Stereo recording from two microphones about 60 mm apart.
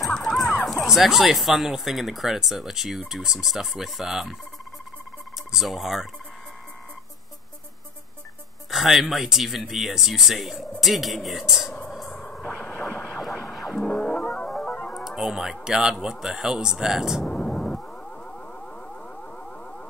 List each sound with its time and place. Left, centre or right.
0.0 s music: centre
0.8 s speech: centre
5.5 s speech: centre
8.6 s music: centre
9.0 s speech: centre
13.7 s music: centre
15.0 s speech: centre
17.3 s a sound: centre